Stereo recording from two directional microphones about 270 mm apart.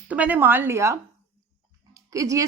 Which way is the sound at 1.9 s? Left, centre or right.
Centre.